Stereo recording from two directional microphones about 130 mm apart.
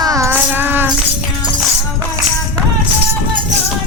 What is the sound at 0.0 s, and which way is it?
Music, 25° right (ahead or behind).